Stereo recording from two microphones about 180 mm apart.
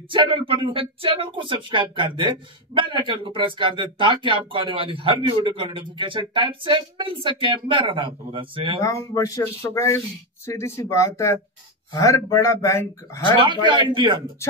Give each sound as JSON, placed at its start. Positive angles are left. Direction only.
{"t": 0.1, "sound": "speech", "side_deg": -30}
{"t": 8.8, "sound": "speech", "side_deg": 15}
{"t": 13.7, "sound": "speech", "side_deg": -25}